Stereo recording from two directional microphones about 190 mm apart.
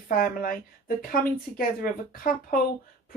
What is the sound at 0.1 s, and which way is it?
Speech, 50° left (ahead or behind).